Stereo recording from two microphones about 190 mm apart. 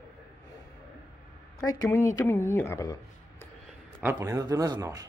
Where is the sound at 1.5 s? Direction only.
15° left (ahead or behind).